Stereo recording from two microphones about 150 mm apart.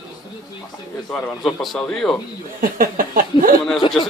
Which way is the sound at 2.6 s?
70° right (ahead or behind).